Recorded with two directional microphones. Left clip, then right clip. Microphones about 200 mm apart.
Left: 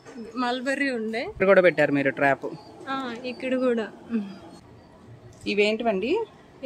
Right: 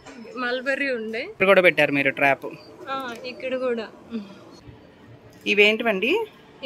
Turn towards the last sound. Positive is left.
turn(degrees=0)  # may be behind; listen again after turning